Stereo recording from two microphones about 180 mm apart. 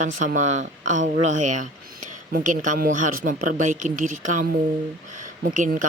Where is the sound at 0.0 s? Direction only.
45° right (ahead or behind).